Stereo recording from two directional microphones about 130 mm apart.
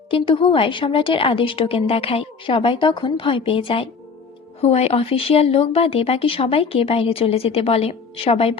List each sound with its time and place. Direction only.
0.1 s a woman's voice: 40° left (ahead or behind)
4.6 s a woman's voice: 55° left (ahead or behind)